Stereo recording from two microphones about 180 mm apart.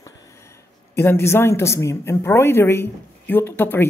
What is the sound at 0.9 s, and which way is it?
A woman's voice, 15° left (ahead or behind).